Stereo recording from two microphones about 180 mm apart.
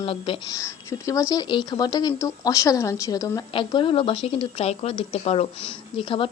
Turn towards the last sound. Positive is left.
turn(degrees=30)  # may be behind; listen again after turning